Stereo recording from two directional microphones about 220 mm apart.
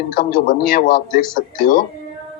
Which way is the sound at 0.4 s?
40° left (ahead or behind).